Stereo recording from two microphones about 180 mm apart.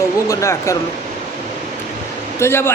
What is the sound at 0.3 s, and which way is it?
Speech, 15° left (ahead or behind).